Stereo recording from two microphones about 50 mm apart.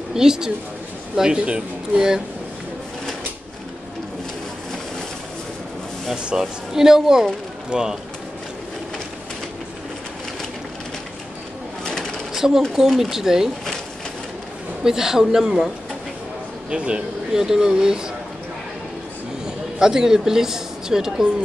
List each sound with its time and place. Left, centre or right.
0.1 s a man's voice: centre
6.3 s speech: centre
11.8 s bird: centre
12.4 s speech: centre
14.8 s speech: centre
16.7 s speech: centre
19.4 s a sound: centre